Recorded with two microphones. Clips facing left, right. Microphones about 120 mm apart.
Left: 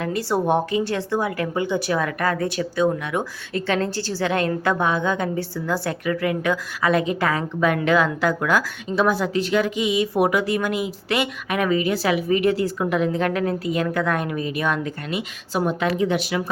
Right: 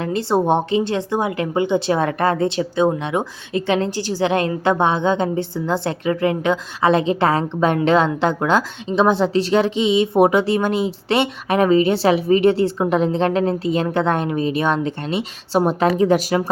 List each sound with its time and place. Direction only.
0.0 s speech: 25° right (ahead or behind); by 16.5 s 40° right (ahead or behind)